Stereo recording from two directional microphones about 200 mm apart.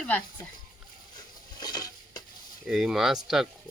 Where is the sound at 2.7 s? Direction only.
Centre (ahead or behind).